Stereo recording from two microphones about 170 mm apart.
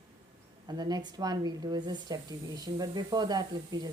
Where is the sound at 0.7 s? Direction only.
25° right (ahead or behind).